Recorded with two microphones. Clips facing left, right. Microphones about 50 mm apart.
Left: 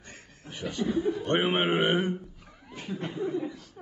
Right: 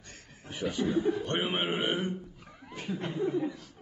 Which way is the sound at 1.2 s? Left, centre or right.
Left.